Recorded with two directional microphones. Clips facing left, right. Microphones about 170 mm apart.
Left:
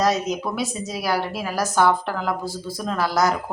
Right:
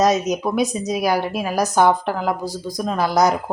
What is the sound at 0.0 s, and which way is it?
A woman's voice, 20° right (ahead or behind).